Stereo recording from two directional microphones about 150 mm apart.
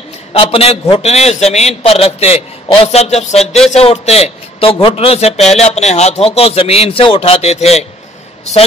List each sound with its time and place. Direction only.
0.3 s a man's voice: 40° left (ahead or behind)